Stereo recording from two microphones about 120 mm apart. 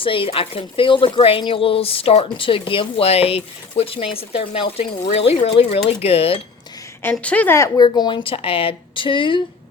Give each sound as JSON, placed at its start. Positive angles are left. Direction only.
{"t": 0.0, "sound": "speech", "side_deg": 45}
{"t": 7.0, "sound": "a woman's voice", "side_deg": 10}
{"t": 7.9, "sound": "speech", "side_deg": 40}